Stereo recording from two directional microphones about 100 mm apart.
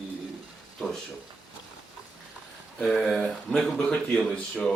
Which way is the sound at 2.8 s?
Centre (ahead or behind).